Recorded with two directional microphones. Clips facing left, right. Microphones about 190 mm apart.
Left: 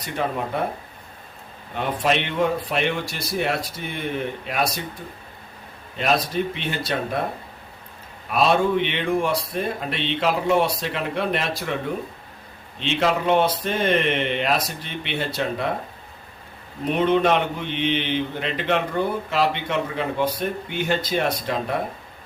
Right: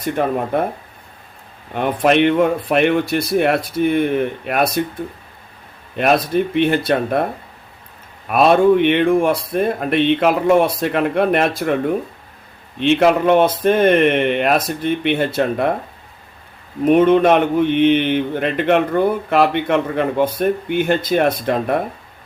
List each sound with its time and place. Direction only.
0.0 s speech: 50° right (ahead or behind)
1.7 s speech: 55° right (ahead or behind)
6.0 s speech: 55° right (ahead or behind)
8.3 s speech: 55° right (ahead or behind)
12.8 s speech: 55° right (ahead or behind)
16.8 s speech: 50° right (ahead or behind)